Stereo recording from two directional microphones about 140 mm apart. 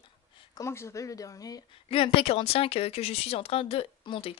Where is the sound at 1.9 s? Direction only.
45° left (ahead or behind).